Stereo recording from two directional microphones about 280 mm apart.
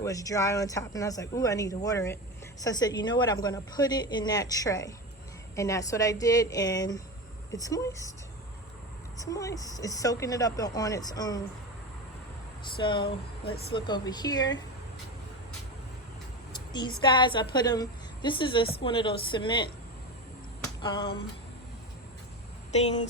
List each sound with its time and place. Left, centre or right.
0.0 s a woman's voice: centre
9.1 s a woman's voice: centre
12.6 s a woman's voice: centre
16.5 s a sound: centre
17.0 s a woman's voice: centre
20.8 s a woman's voice: centre
22.7 s speech: left